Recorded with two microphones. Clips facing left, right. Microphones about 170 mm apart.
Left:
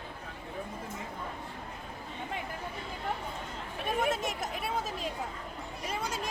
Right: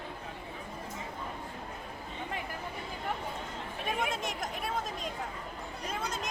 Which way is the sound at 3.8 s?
5° left (ahead or behind).